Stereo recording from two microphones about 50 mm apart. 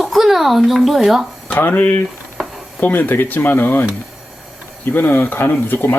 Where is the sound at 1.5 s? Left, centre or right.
Left.